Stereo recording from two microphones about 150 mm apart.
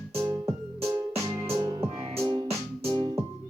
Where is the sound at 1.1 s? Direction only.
40° right (ahead or behind).